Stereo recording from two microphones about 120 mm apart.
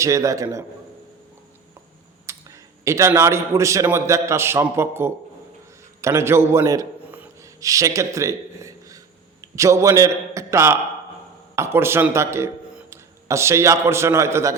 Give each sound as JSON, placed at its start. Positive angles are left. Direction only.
{"t": 0.0, "sound": "a man's voice", "side_deg": -25}
{"t": 2.3, "sound": "a sound", "side_deg": -25}
{"t": 2.8, "sound": "a man's voice", "side_deg": -25}